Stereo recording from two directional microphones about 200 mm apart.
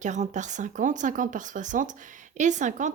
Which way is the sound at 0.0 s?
35° right (ahead or behind).